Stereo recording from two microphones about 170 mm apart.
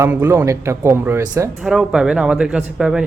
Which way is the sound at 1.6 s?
5° right (ahead or behind).